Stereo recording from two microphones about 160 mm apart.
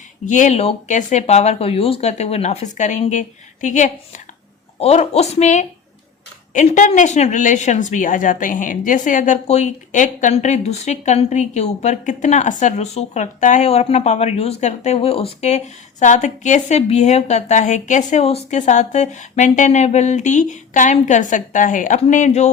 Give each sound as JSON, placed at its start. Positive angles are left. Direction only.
{"t": 0.3, "sound": "a woman's voice", "side_deg": 50}